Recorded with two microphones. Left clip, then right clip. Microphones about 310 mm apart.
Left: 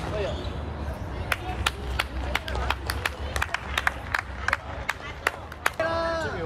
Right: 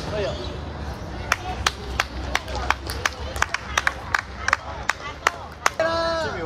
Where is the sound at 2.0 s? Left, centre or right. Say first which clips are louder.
Right 4 dB; right.